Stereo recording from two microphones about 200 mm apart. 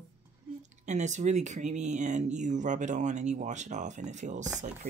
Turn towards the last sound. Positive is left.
turn(degrees=-35)  # may be behind; listen again after turning